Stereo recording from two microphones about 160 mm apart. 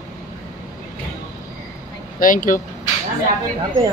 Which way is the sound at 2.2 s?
55° left (ahead or behind).